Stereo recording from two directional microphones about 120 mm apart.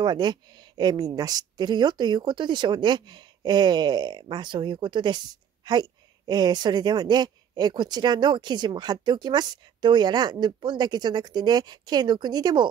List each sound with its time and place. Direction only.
0.0 s speech: 40° right (ahead or behind)